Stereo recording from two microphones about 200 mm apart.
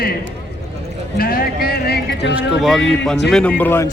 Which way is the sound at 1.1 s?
50° left (ahead or behind).